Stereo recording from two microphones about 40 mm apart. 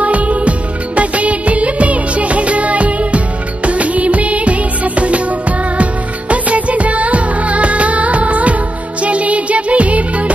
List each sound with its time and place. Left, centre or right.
0.0 s music of bollywood: right
3.6 s music: right
5.8 s music of bollywood: right
9.0 s music: right